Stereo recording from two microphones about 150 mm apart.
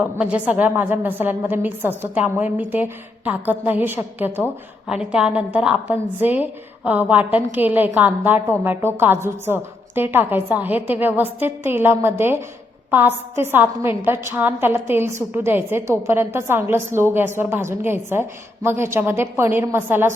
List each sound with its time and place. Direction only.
0.0 s a woman's voice: 10° right (ahead or behind)